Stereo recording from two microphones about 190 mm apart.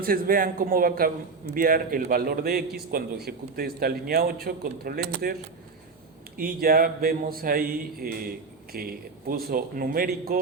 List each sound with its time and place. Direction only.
0.0 s a man's voice: 50° right (ahead or behind)
6.3 s a man's voice: 50° right (ahead or behind)